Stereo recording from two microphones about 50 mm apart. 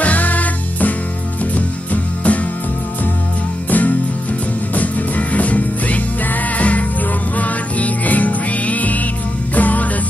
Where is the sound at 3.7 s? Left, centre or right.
Left.